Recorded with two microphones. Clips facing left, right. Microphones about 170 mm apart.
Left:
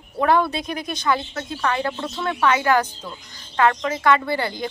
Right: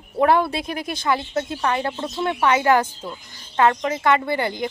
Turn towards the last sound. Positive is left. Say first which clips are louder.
# right 1 dB
turn(degrees=-20)  # may be behind; listen again after turning